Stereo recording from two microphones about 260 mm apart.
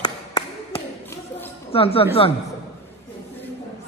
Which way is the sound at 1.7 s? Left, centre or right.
Left.